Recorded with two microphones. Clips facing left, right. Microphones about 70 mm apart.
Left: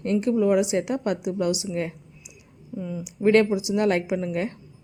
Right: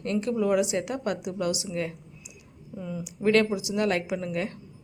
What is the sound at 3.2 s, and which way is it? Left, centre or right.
A woman's voice, left.